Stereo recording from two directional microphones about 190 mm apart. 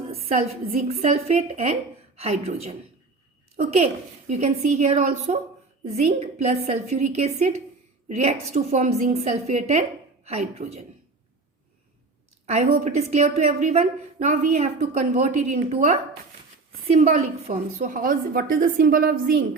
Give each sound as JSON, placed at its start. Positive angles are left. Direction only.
{"t": 0.1, "sound": "a woman's voice", "side_deg": -30}
{"t": 12.5, "sound": "a woman's voice", "side_deg": -35}